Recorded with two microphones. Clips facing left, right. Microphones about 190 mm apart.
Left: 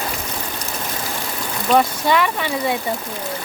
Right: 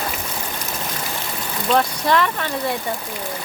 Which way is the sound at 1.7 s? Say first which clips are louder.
Left 2 dB; 5° left (ahead or behind).